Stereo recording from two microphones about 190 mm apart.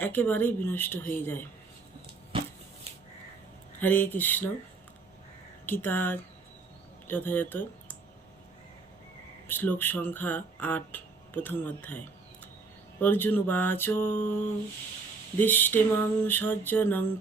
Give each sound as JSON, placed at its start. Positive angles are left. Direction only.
{"t": 0.0, "sound": "speech", "side_deg": 10}
{"t": 2.3, "sound": "a sound", "side_deg": -30}
{"t": 3.8, "sound": "speech", "side_deg": 10}
{"t": 5.6, "sound": "speech", "side_deg": 10}
{"t": 9.5, "sound": "speech", "side_deg": 10}
{"t": 15.4, "sound": "speech", "side_deg": 10}